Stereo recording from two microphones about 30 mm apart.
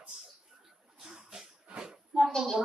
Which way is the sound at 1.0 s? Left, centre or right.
Centre.